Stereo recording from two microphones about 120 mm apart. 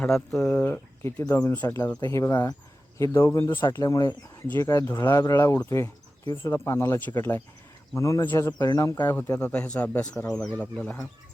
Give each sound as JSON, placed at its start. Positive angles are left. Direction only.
{"t": 0.0, "sound": "speech", "side_deg": 5}
{"t": 0.5, "sound": "speech", "side_deg": 20}
{"t": 1.6, "sound": "speech", "side_deg": 35}
{"t": 3.7, "sound": "speech", "side_deg": 30}